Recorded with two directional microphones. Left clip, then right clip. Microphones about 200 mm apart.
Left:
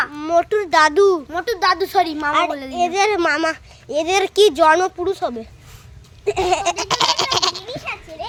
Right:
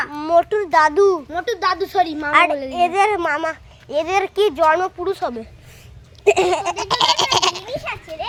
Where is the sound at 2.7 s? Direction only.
5° left (ahead or behind).